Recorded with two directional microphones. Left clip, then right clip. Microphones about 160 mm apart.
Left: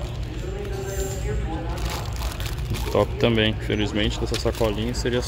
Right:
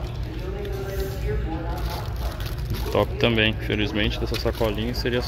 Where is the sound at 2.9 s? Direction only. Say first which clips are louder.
Left 1 dB; 20° left (ahead or behind).